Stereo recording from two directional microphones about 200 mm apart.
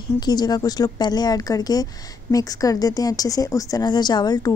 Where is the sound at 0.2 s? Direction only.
20° left (ahead or behind).